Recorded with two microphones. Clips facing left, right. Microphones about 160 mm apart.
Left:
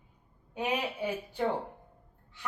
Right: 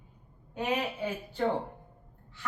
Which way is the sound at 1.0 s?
10° left (ahead or behind).